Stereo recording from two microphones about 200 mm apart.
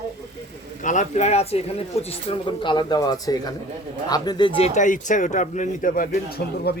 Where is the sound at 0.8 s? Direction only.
40° left (ahead or behind).